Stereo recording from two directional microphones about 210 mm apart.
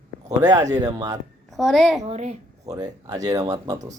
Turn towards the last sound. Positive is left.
turn(degrees=-20)  # may be behind; listen again after turning